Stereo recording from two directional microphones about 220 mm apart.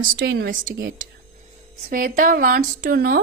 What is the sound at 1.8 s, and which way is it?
A woman's voice, 40° right (ahead or behind).